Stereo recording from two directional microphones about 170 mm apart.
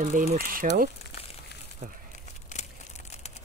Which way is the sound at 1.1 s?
35° left (ahead or behind).